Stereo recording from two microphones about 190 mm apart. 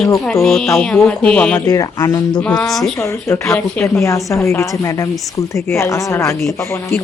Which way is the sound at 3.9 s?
15° left (ahead or behind).